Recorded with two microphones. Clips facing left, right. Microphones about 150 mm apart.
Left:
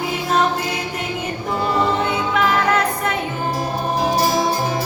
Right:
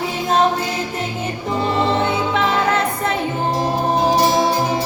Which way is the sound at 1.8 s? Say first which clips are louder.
Right 2 dB; 30° right (ahead or behind).